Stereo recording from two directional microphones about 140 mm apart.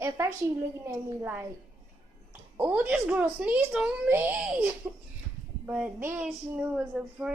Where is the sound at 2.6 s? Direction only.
10° right (ahead or behind).